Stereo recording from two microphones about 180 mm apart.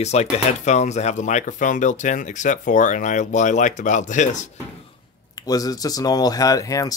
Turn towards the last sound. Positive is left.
turn(degrees=20)  # may be behind; listen again after turning